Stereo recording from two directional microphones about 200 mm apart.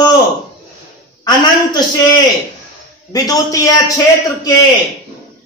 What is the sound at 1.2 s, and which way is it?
A man's voice, 20° left (ahead or behind).